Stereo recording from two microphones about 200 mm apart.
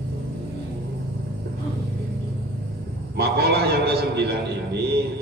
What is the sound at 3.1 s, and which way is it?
A man's voice, 55° right (ahead or behind).